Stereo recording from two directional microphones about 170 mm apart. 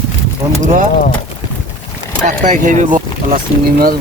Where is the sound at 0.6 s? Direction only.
50° right (ahead or behind).